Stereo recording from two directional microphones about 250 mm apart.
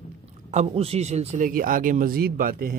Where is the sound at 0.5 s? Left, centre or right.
Right.